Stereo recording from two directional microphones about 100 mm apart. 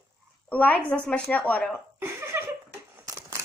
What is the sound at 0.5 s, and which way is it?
A woman's voice, 15° left (ahead or behind).